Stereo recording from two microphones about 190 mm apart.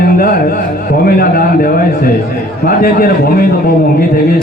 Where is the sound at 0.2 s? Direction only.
50° left (ahead or behind).